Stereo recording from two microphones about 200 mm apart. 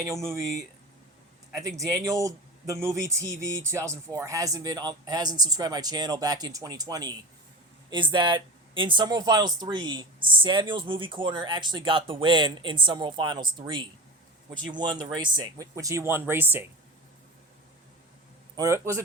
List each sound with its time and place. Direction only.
0.0 s a man's voice: 15° right (ahead or behind)
18.5 s a man's voice: 15° right (ahead or behind)